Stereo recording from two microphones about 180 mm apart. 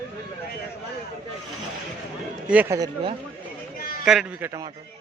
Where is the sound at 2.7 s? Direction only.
25° right (ahead or behind).